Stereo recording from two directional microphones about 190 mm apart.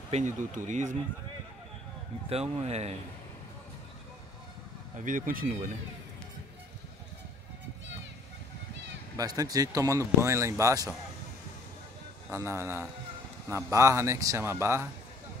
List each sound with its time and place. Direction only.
0.1 s speech: 40° right (ahead or behind)
2.2 s speech: 30° right (ahead or behind)
4.9 s speech: 45° right (ahead or behind)
9.1 s speech: 20° right (ahead or behind)
12.3 s speech: 15° right (ahead or behind)